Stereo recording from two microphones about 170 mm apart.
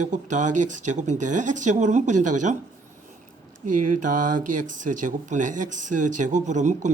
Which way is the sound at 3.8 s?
50° right (ahead or behind).